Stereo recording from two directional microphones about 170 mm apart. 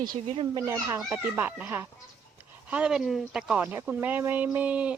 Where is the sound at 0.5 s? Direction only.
20° right (ahead or behind).